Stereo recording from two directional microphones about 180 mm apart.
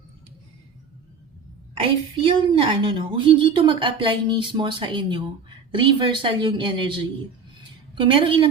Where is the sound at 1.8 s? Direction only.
30° right (ahead or behind).